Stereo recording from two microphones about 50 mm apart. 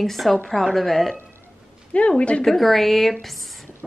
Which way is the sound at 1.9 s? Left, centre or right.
Left.